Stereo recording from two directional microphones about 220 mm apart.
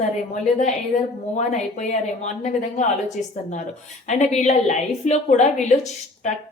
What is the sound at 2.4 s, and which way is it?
Speech, 30° left (ahead or behind).